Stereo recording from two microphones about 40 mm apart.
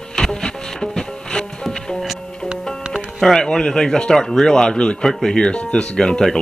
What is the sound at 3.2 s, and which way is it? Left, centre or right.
Speech, centre.